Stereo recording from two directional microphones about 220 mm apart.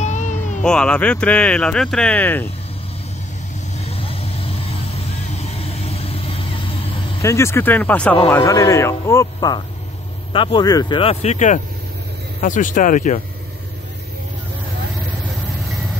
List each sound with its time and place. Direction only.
0.0 s cat: 35° left (ahead or behind)
0.6 s speech: 5° left (ahead or behind)
3.9 s vehicle: 25° left (ahead or behind)
7.2 s speech: 15° left (ahead or behind); by 13.2 s 35° left (ahead or behind)